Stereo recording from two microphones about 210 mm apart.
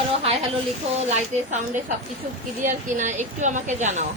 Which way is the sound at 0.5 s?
30° right (ahead or behind).